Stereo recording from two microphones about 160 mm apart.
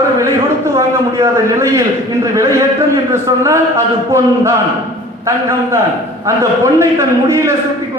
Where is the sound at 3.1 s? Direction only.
15° right (ahead or behind).